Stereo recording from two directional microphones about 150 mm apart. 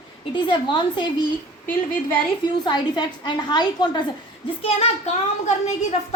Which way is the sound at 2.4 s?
30° left (ahead or behind).